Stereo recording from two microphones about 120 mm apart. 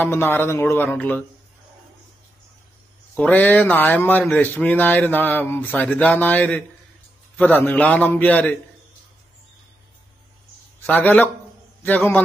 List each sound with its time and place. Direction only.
0.0 s a man's voice: 20° left (ahead or behind)
3.2 s a man's voice: 15° left (ahead or behind)
10.9 s a man's voice: 15° left (ahead or behind)